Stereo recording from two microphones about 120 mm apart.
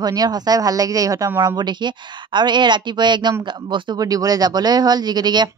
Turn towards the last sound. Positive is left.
turn(degrees=-35)  # may be behind; listen again after turning